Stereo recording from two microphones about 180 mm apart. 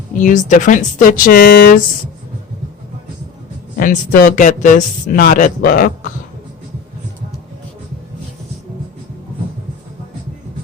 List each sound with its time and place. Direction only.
0.2 s speech: 45° left (ahead or behind)
3.8 s speech: 50° left (ahead or behind)